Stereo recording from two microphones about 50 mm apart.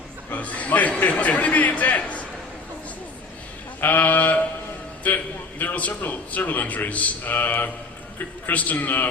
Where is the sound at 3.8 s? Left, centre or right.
Left.